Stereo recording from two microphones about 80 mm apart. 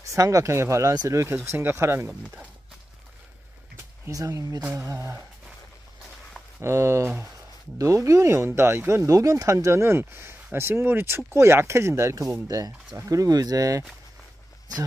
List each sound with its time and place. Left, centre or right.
0.0 s speech: right
4.1 s speech: right
4.7 s speech: right
6.6 s speech: right